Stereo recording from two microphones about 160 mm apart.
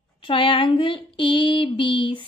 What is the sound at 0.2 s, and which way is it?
Child singing, 35° left (ahead or behind).